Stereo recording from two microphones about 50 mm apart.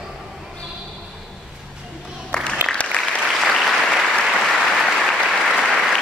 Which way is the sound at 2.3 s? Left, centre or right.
Centre.